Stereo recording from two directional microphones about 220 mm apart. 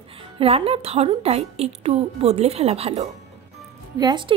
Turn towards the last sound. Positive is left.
turn(degrees=-20)  # may be behind; listen again after turning